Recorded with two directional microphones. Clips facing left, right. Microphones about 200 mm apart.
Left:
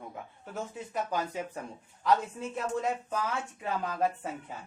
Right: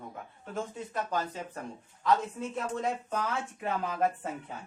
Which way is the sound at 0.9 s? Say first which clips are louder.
Left 2 dB; 10° left (ahead or behind).